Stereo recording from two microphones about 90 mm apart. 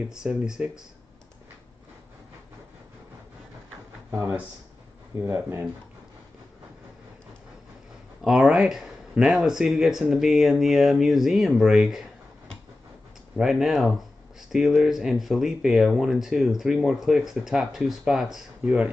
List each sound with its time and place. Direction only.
0.1 s speech: 10° right (ahead or behind)
5.2 s speech: 30° right (ahead or behind)
8.2 s speech: 5° right (ahead or behind)
13.4 s speech: centre (ahead or behind)
18.6 s speech: 15° right (ahead or behind)